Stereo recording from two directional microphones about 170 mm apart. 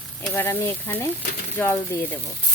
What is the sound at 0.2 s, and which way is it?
Stir, 10° left (ahead or behind).